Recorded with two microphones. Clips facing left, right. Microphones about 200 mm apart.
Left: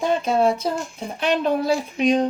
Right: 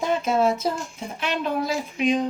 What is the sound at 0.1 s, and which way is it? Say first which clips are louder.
Speech: left 1 dB; 30° left (ahead or behind).